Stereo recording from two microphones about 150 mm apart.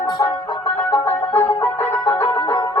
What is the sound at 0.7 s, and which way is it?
Music, 40° left (ahead or behind).